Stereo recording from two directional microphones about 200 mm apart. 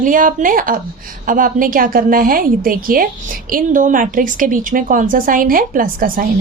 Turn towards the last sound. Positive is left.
turn(degrees=-45)  # may be behind; listen again after turning